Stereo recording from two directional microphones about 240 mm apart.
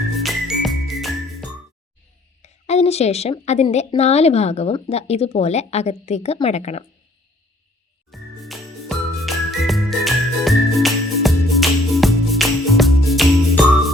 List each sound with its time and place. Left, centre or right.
0.2 s music: centre
2.4 s a woman's voice: left
8.1 s jingle: centre